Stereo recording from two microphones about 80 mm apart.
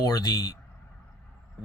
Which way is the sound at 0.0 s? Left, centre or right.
Left.